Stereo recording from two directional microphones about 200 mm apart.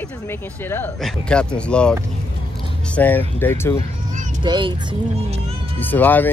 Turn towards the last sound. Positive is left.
turn(degrees=10)  # may be behind; listen again after turning